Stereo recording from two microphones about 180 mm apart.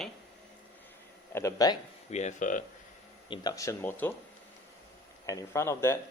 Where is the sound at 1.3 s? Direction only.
15° left (ahead or behind).